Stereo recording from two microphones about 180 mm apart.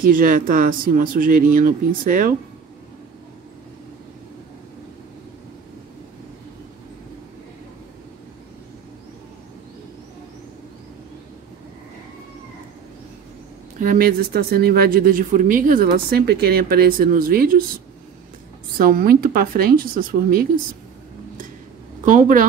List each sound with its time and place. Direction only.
0.0 s speech: 50° right (ahead or behind)
13.7 s speech: 50° right (ahead or behind)
18.8 s speech: 55° right (ahead or behind)
22.0 s speech: 50° right (ahead or behind)